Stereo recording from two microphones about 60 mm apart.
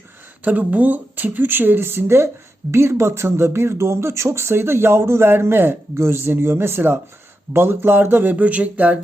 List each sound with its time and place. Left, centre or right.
0.4 s speech: right